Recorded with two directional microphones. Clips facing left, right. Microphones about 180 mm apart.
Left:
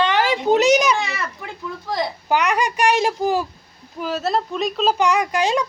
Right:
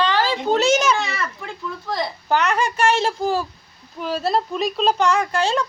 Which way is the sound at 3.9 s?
Centre (ahead or behind).